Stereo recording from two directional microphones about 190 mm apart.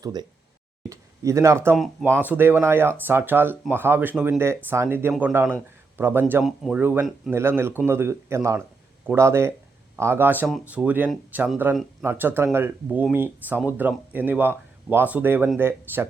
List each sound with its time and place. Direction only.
0.0 s speech: 20° right (ahead or behind)
1.7 s speech: centre (ahead or behind)